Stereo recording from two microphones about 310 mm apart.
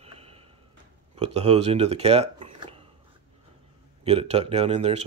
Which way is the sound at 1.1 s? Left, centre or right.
Centre.